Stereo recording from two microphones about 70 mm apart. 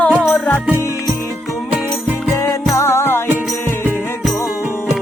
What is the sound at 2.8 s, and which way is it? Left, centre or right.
Music, left.